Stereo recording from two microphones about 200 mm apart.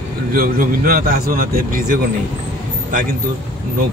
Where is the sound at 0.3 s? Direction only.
45° right (ahead or behind).